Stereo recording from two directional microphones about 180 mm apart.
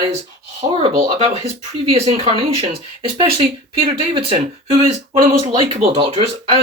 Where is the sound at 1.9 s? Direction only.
35° right (ahead or behind).